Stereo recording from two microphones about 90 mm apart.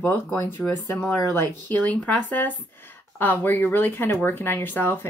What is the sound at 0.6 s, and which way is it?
Speech, 5° left (ahead or behind).